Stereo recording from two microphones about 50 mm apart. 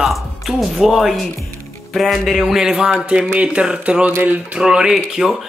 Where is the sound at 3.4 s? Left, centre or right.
Right.